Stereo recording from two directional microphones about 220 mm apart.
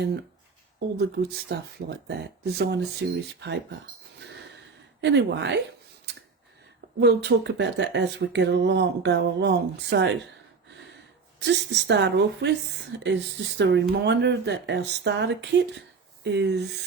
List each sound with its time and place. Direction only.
0.9 s speech: 45° right (ahead or behind)
4.9 s speech: 50° right (ahead or behind)
7.0 s speech: 50° right (ahead or behind)
11.4 s speech: 50° right (ahead or behind)